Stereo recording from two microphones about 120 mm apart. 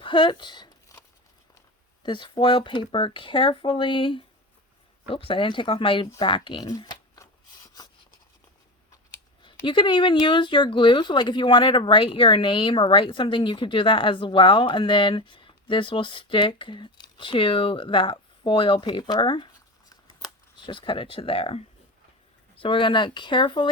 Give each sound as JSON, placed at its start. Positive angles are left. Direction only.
{"t": 0.0, "sound": "speech", "side_deg": 45}
{"t": 2.0, "sound": "speech", "side_deg": 40}
{"t": 6.1, "sound": "shuffling cards", "side_deg": 40}
{"t": 9.4, "sound": "speech", "side_deg": 45}
{"t": 20.6, "sound": "speech", "side_deg": 45}